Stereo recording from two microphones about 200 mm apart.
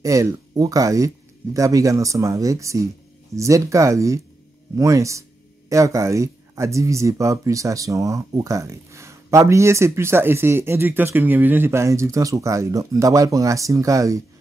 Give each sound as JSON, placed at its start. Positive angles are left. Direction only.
{"t": 0.0, "sound": "speech", "side_deg": -15}